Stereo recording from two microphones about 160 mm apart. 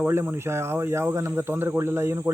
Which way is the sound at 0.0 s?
15° right (ahead or behind).